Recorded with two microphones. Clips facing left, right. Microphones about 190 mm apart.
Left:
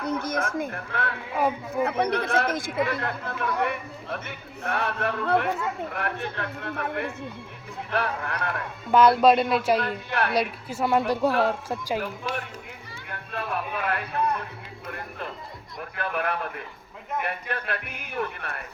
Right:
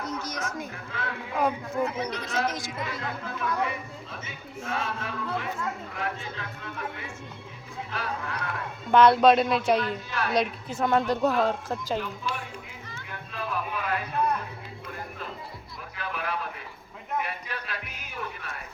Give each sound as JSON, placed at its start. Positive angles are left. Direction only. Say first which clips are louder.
{"t": 0.0, "sound": "speech", "louder": "left 6 dB", "side_deg": 60}
{"t": 1.3, "sound": "speech", "louder": "left 1 dB", "side_deg": 5}
{"t": 1.8, "sound": "speech", "louder": "left 6 dB", "side_deg": 60}
{"t": 8.9, "sound": "speech", "louder": "even", "side_deg": 5}
{"t": 9.8, "sound": "speech", "louder": "left 3 dB", "side_deg": 60}
{"t": 10.3, "sound": "speech", "louder": "even", "side_deg": 5}
{"t": 11.9, "sound": "speech", "louder": "left 2 dB", "side_deg": 65}
{"t": 13.1, "sound": "music", "louder": "left 3 dB", "side_deg": 55}
{"t": 15.8, "sound": "speech", "louder": "left 6 dB", "side_deg": 55}